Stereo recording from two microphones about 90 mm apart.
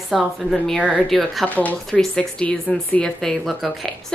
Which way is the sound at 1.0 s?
5° left (ahead or behind).